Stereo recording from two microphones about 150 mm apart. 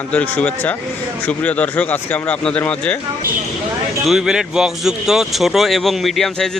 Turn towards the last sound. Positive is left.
turn(degrees=0)  # may be behind; listen again after turning